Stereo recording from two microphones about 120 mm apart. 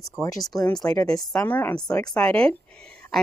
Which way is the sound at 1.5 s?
15° left (ahead or behind).